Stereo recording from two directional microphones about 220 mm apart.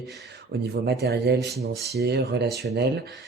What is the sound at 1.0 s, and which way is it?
Speech, 45° right (ahead or behind).